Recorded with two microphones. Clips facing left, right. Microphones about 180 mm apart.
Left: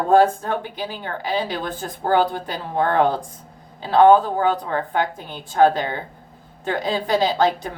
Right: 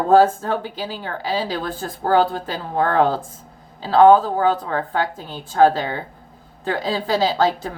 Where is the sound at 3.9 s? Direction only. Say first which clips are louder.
Right 1 dB; 20° left (ahead or behind).